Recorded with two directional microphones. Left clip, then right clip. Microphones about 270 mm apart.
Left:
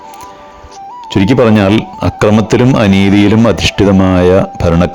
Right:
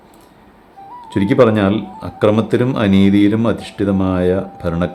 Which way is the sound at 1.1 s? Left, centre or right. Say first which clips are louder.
Left 3 dB; left.